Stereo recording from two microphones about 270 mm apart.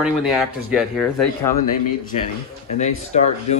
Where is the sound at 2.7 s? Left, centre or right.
Left.